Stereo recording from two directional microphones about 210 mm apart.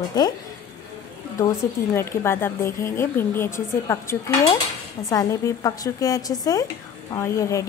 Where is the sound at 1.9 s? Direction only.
10° left (ahead or behind).